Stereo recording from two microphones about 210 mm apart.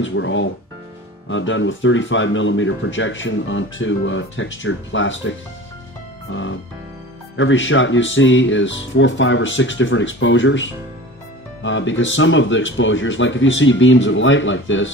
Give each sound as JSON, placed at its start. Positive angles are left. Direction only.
{"t": 0.0, "sound": "speech", "side_deg": 65}
{"t": 6.3, "sound": "speech", "side_deg": 65}